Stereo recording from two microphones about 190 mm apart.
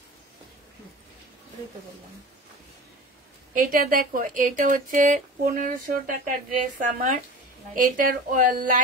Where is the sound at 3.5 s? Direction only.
50° right (ahead or behind).